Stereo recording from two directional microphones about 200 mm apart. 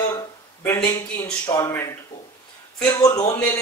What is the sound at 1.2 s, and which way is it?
Speech, 20° left (ahead or behind).